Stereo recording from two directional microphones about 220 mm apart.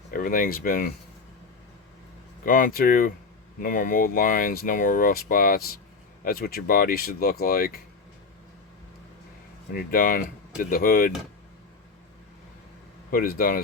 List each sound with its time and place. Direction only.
0.1 s speech: 40° left (ahead or behind)
2.4 s speech: 40° left (ahead or behind)
9.7 s speech: 40° left (ahead or behind)
13.1 s speech: 40° left (ahead or behind)